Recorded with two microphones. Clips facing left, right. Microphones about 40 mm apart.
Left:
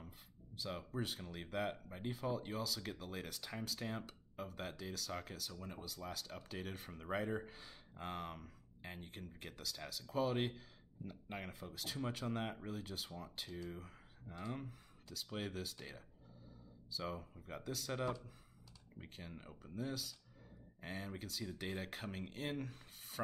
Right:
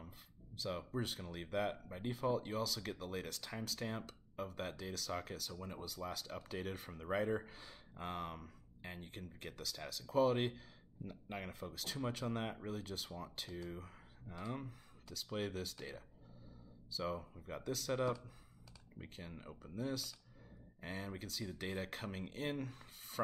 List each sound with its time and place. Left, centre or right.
0.0 s speech: centre